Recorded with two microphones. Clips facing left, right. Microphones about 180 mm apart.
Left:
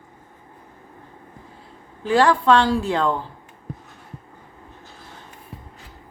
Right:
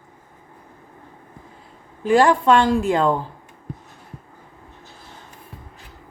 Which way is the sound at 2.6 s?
45° right (ahead or behind).